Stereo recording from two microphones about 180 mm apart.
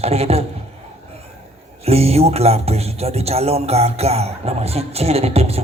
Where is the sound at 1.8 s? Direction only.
35° right (ahead or behind).